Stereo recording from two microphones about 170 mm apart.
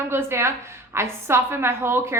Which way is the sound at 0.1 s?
15° right (ahead or behind).